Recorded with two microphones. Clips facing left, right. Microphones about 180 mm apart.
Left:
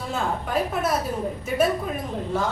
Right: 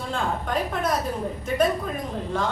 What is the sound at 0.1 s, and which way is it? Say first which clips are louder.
Speech: left 1 dB; 5° left (ahead or behind).